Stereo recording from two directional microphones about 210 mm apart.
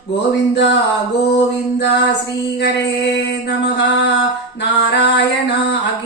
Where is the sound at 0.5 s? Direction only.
55° left (ahead or behind).